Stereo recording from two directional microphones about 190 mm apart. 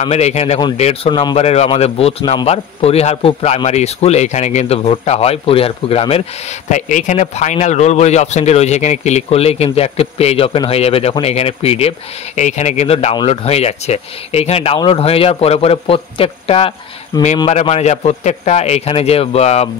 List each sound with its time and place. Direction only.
0.0 s a man's voice: 35° left (ahead or behind)